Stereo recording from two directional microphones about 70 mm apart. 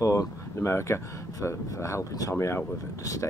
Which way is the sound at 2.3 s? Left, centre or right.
Left.